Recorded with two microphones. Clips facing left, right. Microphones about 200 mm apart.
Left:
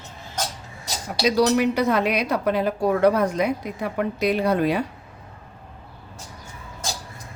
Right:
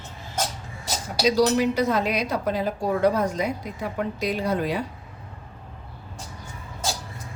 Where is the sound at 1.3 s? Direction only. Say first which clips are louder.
Left 2 dB; 60° left (ahead or behind).